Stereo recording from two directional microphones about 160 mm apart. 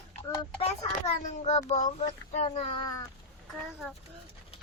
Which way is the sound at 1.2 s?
50° left (ahead or behind).